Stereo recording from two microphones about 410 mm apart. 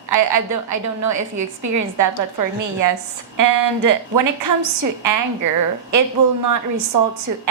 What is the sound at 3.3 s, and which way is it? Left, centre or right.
A woman's voice, right.